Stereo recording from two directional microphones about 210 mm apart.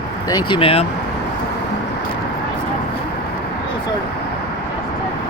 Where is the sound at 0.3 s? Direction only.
20° left (ahead or behind).